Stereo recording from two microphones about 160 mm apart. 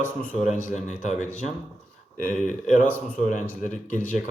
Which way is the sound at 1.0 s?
50° left (ahead or behind).